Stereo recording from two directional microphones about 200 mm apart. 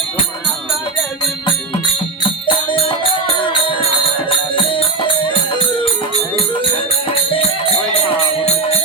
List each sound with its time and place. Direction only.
2.2 s music: 25° left (ahead or behind)
7.1 s music: 25° left (ahead or behind)